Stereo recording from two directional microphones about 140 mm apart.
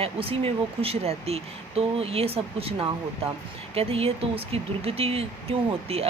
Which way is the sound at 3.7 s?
45° right (ahead or behind).